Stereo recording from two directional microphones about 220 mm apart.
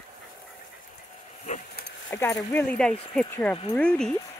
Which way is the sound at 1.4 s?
30° left (ahead or behind).